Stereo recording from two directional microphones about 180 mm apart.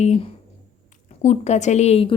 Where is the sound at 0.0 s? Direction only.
35° left (ahead or behind).